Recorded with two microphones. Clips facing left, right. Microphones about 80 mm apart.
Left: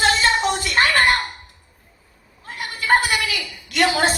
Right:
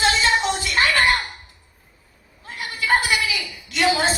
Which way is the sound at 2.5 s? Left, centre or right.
Left.